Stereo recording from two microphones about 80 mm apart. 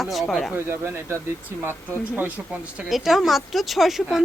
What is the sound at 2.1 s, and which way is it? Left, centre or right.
Speech, centre.